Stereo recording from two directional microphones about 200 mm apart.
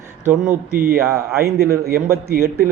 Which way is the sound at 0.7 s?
45° right (ahead or behind).